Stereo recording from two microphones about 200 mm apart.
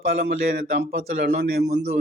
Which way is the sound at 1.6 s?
60° right (ahead or behind).